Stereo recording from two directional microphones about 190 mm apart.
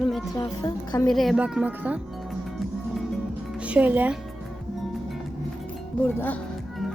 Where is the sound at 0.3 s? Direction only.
20° left (ahead or behind).